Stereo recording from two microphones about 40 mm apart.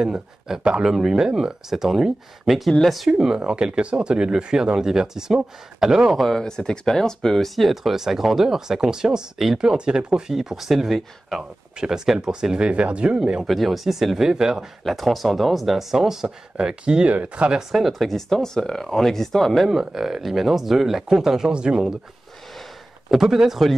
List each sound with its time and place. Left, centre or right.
0.0 s speech: centre
3.4 s speech: right
6.4 s speech: centre; by 10.3 s right
10.3 s speech: centre
11.8 s speech: right
13.5 s speech: centre
14.8 s speech: centre
16.5 s speech: right
17.6 s speech: centre
17.9 s speech: centre
19.7 s speech: centre
21.5 s speech: right
23.0 s speech: centre